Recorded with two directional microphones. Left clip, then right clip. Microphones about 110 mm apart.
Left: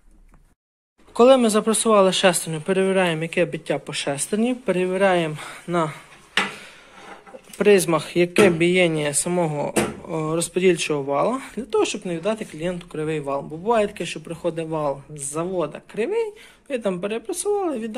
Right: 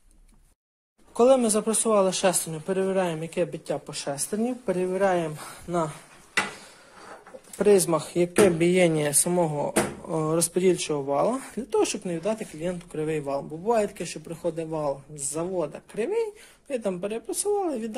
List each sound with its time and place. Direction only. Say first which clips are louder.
1.1 s speech: left 5 dB; 15° right (ahead or behind)
7.5 s a man's voice: left 4 dB; 25° right (ahead or behind)
8.5 s speech: left 3 dB; 55° right (ahead or behind)
9.3 s a man's voice: left 3 dB; 30° right (ahead or behind)
10.0 s speech: left 1 dB; 55° right (ahead or behind)
10.5 s speech: left 4 dB; 35° right (ahead or behind)
12.3 s speech: left 4 dB; 30° right (ahead or behind)
13.4 s a man's voice: left 5 dB; 30° right (ahead or behind)
16.9 s speech: left 4 dB; 15° right (ahead or behind)
17.6 s speech: left 3 dB; 35° right (ahead or behind)